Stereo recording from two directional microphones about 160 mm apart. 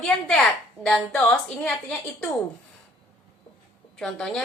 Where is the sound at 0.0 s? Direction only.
5° left (ahead or behind).